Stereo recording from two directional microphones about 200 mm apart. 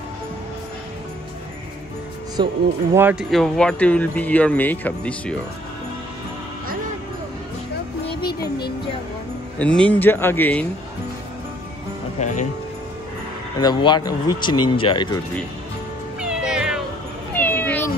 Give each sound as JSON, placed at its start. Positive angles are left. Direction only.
{"t": 2.3, "sound": "speech", "side_deg": -15}
{"t": 8.2, "sound": "music", "side_deg": 50}
{"t": 9.6, "sound": "speech", "side_deg": 5}
{"t": 12.2, "sound": "speech", "side_deg": 35}
{"t": 13.6, "sound": "speech", "side_deg": 20}
{"t": 16.2, "sound": "cat", "side_deg": -5}
{"t": 17.3, "sound": "cat", "side_deg": 10}